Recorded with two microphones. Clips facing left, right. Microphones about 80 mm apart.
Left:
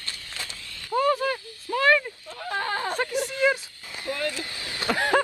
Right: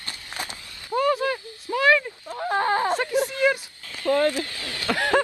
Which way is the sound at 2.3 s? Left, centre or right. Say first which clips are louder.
Right 7 dB; right.